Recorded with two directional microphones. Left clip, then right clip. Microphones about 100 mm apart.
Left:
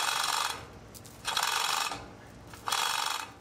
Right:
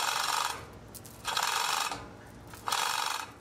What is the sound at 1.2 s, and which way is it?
Mechanisms, 5° right (ahead or behind).